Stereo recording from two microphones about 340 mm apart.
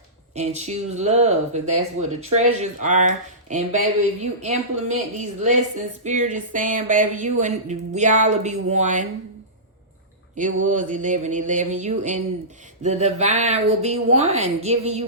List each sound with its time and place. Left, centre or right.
0.3 s speech: centre
10.3 s speech: right